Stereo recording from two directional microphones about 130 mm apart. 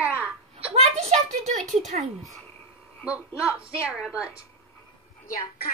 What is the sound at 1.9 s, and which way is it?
Speech, 80° right.